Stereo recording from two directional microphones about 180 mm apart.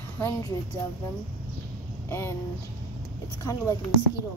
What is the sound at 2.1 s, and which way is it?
Speech, 15° left (ahead or behind).